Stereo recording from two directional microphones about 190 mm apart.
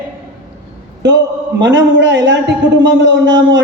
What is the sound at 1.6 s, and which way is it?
A man's voice, 70° right (ahead or behind).